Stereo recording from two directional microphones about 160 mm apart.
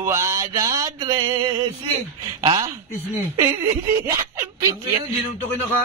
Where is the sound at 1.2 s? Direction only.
35° right (ahead or behind).